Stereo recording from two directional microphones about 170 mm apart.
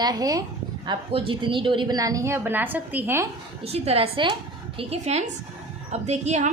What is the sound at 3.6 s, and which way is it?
A woman's voice, 35° right (ahead or behind).